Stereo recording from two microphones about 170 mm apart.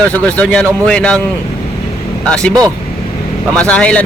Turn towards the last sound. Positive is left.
turn(degrees=5)  # may be behind; listen again after turning